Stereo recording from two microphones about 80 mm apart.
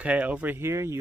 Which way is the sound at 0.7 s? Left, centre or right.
Right.